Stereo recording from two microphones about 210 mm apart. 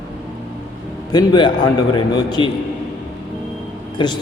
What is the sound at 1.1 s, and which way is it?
A man's voice, 20° left (ahead or behind).